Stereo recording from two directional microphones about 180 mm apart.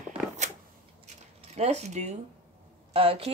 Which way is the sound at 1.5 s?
35° right (ahead or behind).